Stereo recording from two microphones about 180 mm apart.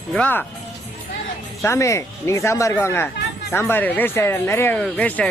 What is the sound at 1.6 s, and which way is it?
Speech, 15° left (ahead or behind).